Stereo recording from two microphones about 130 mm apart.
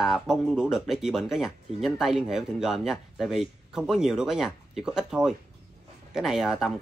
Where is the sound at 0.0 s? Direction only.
5° right (ahead or behind).